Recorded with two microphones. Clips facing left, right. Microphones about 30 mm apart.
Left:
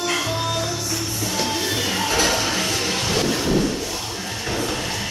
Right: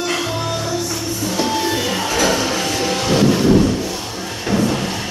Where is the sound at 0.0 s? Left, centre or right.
Centre.